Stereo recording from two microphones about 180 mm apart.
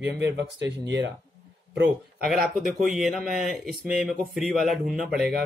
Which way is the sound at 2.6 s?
Centre (ahead or behind).